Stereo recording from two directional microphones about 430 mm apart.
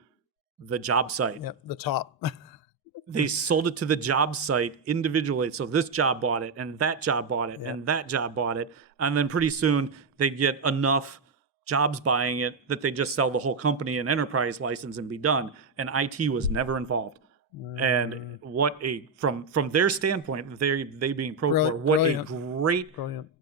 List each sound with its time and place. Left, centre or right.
0.7 s speech: right
1.5 s speech: left
3.1 s speech: right